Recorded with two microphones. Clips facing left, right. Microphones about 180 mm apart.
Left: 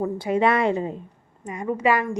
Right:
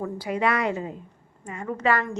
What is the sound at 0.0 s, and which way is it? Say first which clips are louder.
A woman's voice: left 5 dB; 25° left (ahead or behind).